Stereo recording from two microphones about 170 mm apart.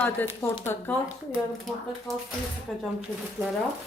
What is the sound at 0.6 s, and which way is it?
Speech, 15° left (ahead or behind).